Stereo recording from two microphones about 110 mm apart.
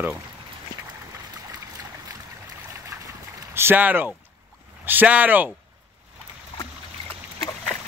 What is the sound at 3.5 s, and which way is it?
Speech, 20° right (ahead or behind).